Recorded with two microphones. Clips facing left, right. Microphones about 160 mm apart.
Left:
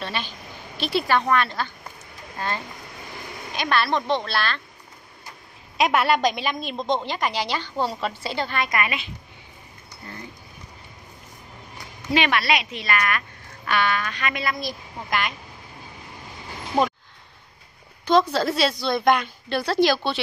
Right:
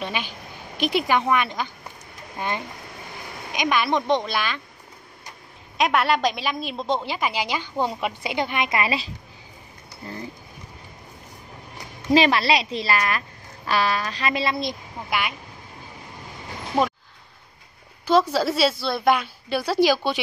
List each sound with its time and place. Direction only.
0.0 s a woman's voice: 10° right (ahead or behind)
5.8 s a woman's voice: centre (ahead or behind); by 9.1 s 30° right (ahead or behind)
12.1 s a woman's voice: 35° right (ahead or behind)
15.0 s a woman's voice: 5° right (ahead or behind)
18.3 s a woman's voice: 5° right (ahead or behind)